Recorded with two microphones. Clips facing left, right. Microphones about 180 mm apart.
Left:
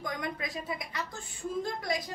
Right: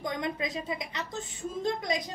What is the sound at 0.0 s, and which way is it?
Speech, 20° right (ahead or behind).